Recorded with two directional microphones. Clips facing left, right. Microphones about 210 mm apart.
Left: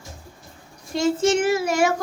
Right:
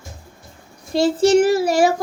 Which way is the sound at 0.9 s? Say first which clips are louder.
Right 5 dB; 35° right (ahead or behind).